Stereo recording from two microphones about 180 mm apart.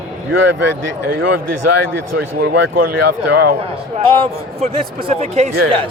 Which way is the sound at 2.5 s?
65° right (ahead or behind).